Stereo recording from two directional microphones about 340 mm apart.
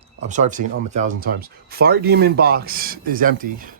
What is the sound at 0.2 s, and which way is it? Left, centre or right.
Speech, right.